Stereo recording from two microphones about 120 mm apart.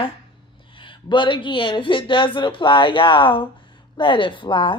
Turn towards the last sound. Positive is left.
turn(degrees=45)  # may be behind; listen again after turning